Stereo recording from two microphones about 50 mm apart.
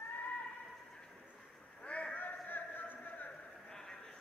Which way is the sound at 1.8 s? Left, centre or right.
Left.